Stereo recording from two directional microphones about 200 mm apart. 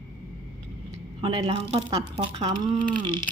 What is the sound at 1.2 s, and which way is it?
Speech, 25° right (ahead or behind).